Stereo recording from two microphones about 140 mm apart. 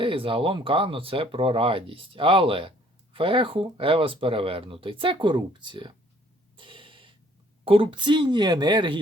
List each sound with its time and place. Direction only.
0.0 s speech: 40° right (ahead or behind)
6.6 s a sound: 35° right (ahead or behind)
7.6 s speech: 40° right (ahead or behind)